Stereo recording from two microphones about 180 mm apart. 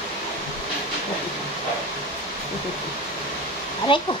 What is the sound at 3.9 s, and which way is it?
Speech, 25° left (ahead or behind).